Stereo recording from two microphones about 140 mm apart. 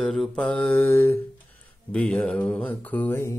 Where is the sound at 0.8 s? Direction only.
15° left (ahead or behind).